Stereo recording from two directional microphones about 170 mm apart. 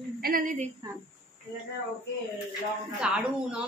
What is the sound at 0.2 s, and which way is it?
Speech, 55° right (ahead or behind).